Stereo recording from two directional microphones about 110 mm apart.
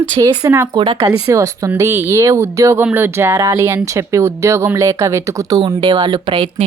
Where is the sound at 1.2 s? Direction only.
30° right (ahead or behind).